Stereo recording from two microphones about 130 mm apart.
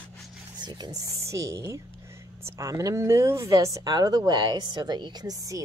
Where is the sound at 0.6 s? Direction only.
35° right (ahead or behind).